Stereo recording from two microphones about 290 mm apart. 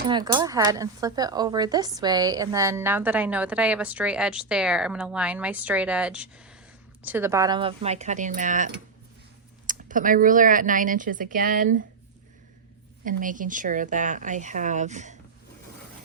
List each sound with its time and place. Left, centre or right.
0.1 s a woman's voice: centre
13.1 s speech: right